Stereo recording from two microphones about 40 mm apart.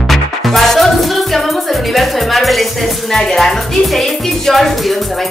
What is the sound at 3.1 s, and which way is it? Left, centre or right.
Speech, centre.